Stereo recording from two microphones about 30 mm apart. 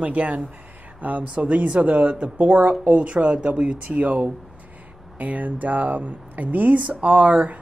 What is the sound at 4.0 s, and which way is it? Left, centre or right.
Speech, right.